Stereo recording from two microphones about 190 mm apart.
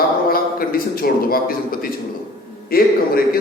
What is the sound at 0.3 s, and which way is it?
A man's voice, 50° left (ahead or behind).